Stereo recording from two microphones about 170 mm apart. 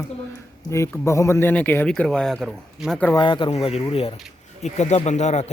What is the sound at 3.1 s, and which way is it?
Speech, 30° left (ahead or behind).